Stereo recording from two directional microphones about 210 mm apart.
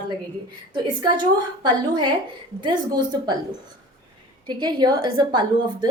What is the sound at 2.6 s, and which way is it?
Speech, 20° right (ahead or behind).